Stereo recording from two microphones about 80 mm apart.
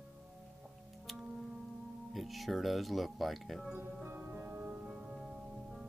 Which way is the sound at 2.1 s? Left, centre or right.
Centre.